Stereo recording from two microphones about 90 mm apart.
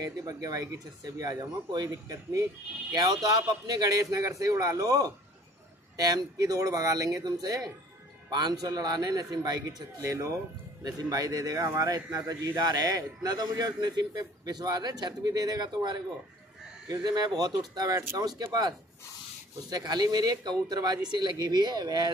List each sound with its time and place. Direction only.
0.0 s a man's voice: 40° right (ahead or behind)